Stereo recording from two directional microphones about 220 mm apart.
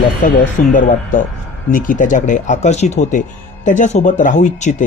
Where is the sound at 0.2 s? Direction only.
35° left (ahead or behind).